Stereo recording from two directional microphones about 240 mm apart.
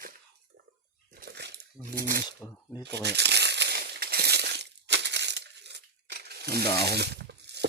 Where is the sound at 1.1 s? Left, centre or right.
Right.